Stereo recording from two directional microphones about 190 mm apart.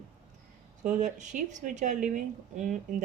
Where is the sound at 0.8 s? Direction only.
40° right (ahead or behind).